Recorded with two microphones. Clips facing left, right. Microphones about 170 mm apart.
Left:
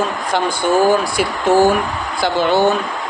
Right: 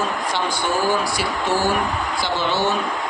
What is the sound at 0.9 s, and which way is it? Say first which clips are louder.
Speech: left 5 dB; 50° left (ahead or behind).